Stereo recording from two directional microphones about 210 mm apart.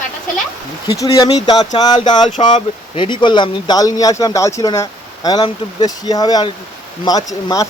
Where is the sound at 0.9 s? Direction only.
15° left (ahead or behind).